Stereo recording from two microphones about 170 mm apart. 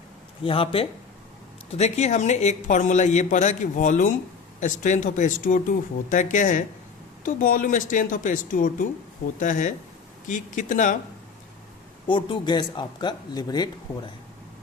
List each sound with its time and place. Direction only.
0.4 s speech: 30° left (ahead or behind); by 10.9 s 50° left (ahead or behind)
12.0 s speech: 30° left (ahead or behind)